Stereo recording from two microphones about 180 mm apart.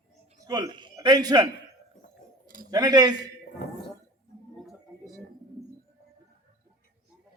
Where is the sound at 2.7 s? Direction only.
20° right (ahead or behind).